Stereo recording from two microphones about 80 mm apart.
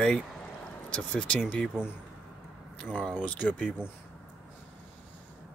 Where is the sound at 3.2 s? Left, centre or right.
Centre.